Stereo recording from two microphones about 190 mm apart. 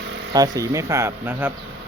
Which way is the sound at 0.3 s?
20° right (ahead or behind).